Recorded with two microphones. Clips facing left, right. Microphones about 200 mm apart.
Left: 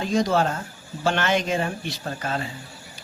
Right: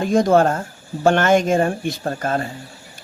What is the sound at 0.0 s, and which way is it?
Speech, 50° right (ahead or behind).